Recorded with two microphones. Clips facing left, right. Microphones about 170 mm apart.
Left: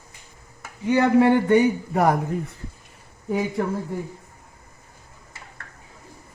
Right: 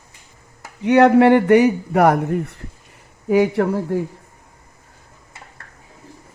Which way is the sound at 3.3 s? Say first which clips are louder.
Right 8 dB; 80° right.